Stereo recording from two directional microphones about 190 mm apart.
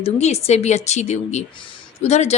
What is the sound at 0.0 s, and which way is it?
Speech, 35° left (ahead or behind).